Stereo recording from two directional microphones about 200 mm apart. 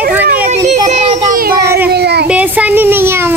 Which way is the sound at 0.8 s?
35° right (ahead or behind).